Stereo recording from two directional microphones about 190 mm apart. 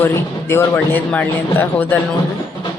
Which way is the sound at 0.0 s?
10° left (ahead or behind).